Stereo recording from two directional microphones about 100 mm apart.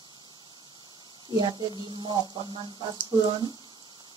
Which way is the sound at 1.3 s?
50° right (ahead or behind).